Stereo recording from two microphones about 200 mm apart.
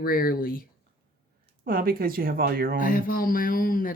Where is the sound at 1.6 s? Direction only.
45° right (ahead or behind).